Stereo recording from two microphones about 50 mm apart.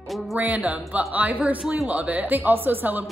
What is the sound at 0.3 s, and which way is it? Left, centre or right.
A woman's voice, right.